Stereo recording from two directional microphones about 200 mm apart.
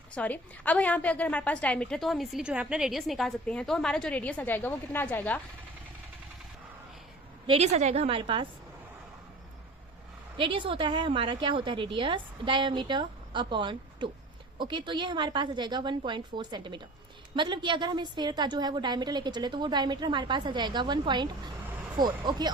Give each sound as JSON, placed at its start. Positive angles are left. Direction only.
{"t": 0.1, "sound": "a woman's voice", "side_deg": 5}
{"t": 7.4, "sound": "a woman's voice", "side_deg": -30}
{"t": 10.3, "sound": "a woman's voice", "side_deg": -25}